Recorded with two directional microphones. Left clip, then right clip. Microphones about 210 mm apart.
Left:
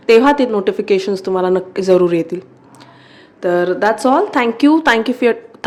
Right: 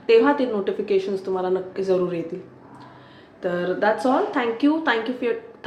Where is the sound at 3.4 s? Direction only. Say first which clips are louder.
Left 7 dB; 55° left (ahead or behind).